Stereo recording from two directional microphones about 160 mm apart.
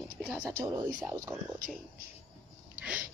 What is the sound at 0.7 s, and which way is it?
Speech, 20° right (ahead or behind).